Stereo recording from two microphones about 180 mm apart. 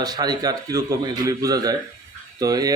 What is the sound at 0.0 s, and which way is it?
A man's voice, 20° right (ahead or behind).